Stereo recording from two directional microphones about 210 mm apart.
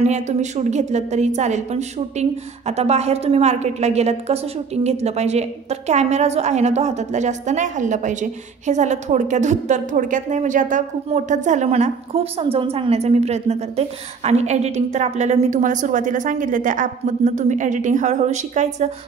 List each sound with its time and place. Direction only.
0.0 s a woman's voice: 35° right (ahead or behind)